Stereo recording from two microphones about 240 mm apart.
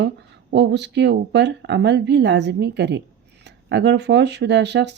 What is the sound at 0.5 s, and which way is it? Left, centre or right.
Speech, right.